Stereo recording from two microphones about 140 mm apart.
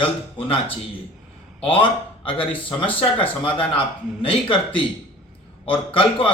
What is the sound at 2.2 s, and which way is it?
Speech, 40° left (ahead or behind).